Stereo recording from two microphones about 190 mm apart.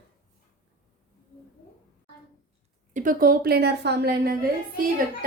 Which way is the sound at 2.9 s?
45° right (ahead or behind).